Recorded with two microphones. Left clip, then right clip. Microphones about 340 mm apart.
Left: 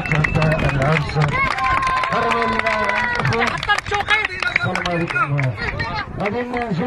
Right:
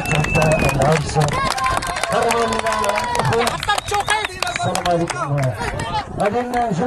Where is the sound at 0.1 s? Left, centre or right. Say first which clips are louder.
Right 3 dB; right.